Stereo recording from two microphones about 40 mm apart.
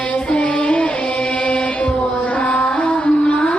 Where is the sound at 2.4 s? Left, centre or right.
Left.